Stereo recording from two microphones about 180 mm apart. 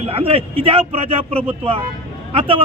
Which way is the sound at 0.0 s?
30° right (ahead or behind).